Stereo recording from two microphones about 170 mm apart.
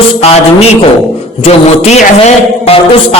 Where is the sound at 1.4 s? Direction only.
40° left (ahead or behind).